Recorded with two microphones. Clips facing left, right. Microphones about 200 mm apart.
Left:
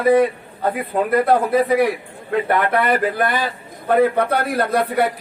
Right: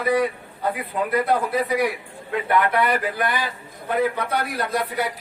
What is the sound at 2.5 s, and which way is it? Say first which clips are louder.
A man's voice: left 1 dB; 45° left (ahead or behind).